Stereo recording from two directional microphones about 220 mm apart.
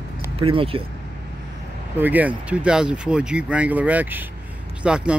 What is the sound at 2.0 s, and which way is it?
Speech, 10° right (ahead or behind).